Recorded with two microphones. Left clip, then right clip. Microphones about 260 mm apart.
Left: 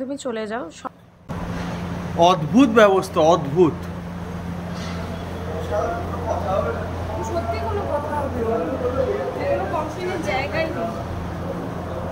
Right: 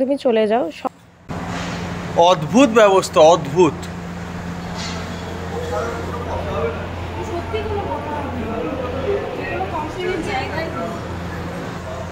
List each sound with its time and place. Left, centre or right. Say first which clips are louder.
0.2 s speech: right 11 dB; centre
2.1 s speech: right 3 dB; centre